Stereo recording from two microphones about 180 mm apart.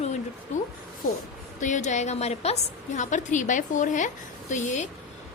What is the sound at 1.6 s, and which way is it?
A woman's voice, 40° left (ahead or behind).